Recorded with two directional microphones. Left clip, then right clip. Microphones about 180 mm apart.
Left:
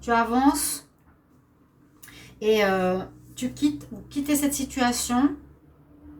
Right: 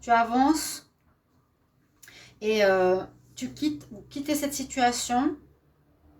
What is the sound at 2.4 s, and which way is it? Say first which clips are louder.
A woman's voice: even; 50° right (ahead or behind).